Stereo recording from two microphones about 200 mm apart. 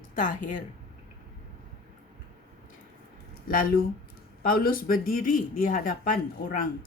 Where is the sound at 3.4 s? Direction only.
45° left (ahead or behind).